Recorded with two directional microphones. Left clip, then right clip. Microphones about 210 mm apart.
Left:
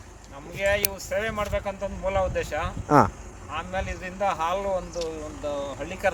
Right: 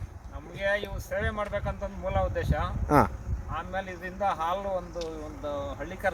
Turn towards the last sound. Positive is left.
turn(degrees=10)  # may be behind; listen again after turning